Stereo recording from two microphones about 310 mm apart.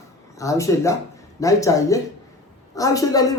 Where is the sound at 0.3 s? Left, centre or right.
Centre.